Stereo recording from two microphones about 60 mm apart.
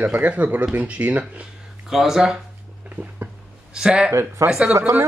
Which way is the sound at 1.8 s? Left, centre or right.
Centre.